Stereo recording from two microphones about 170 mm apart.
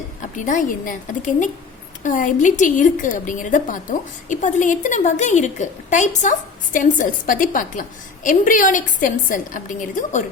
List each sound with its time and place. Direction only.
0.2 s a woman's voice: 50° left (ahead or behind)